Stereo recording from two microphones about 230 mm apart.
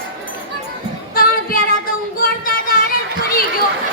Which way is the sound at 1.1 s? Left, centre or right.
Left.